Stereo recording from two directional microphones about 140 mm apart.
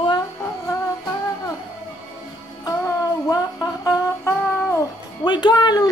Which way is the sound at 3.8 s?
20° left (ahead or behind).